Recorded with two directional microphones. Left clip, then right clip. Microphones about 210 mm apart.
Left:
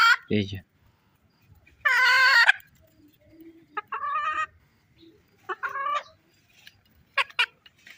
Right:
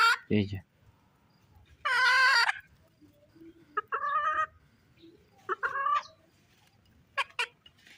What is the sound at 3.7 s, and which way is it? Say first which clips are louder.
Chicken: left 1 dB; 45° left (ahead or behind).